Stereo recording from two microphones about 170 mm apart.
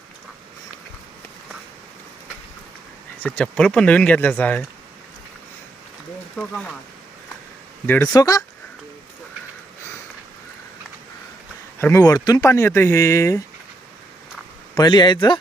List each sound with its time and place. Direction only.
3.2 s speech: 5° left (ahead or behind)
6.3 s speech: 5° left (ahead or behind)
7.9 s speech: 10° left (ahead or behind)
8.1 s speech: 20° left (ahead or behind)
11.8 s speech: 15° left (ahead or behind)
14.8 s speech: 25° left (ahead or behind)